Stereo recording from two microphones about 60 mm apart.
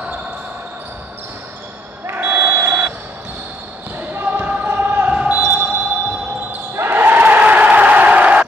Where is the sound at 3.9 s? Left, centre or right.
Right.